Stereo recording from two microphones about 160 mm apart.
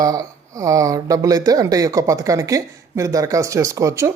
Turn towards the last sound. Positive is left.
turn(degrees=-20)  # may be behind; listen again after turning